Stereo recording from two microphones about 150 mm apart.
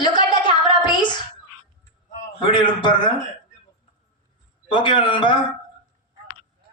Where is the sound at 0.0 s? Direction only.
30° left (ahead or behind).